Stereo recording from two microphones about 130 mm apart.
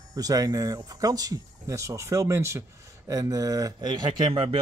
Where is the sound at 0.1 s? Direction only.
25° right (ahead or behind).